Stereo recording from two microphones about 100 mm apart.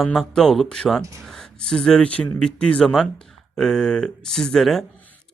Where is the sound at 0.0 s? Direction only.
5° left (ahead or behind).